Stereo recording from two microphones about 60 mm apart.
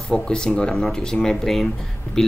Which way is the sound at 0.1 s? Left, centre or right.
Centre.